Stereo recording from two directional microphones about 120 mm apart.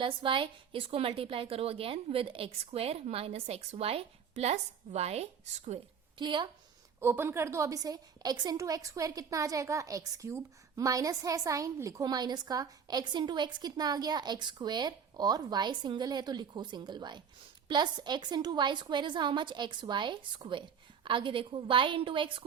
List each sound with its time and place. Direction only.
0.0 s a woman's voice: 45° right (ahead or behind); by 5.8 s 60° right (ahead or behind)
6.1 s a woman's voice: 40° right (ahead or behind)
7.0 s a woman's voice: 20° right (ahead or behind); by 22.4 s 45° right (ahead or behind)